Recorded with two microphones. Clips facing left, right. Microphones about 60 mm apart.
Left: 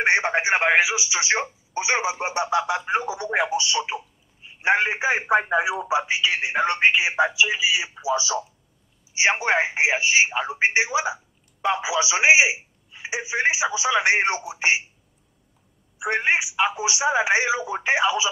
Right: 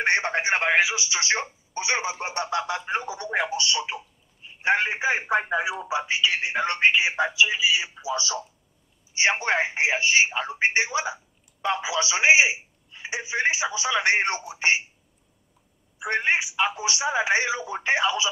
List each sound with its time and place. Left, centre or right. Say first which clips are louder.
0.0 s speech: left 3 dB; centre
16.0 s speech: left 2 dB; centre